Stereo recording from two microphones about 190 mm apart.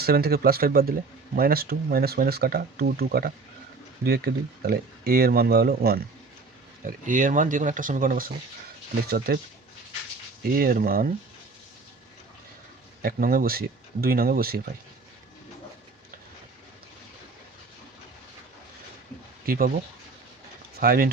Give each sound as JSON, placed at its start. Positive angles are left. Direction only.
{"t": 0.0, "sound": "speech", "side_deg": -55}
{"t": 6.8, "sound": "speech", "side_deg": -45}
{"t": 10.5, "sound": "speech", "side_deg": -50}
{"t": 13.0, "sound": "speech", "side_deg": -50}
{"t": 19.5, "sound": "speech", "side_deg": -50}
{"t": 20.7, "sound": "speech", "side_deg": -50}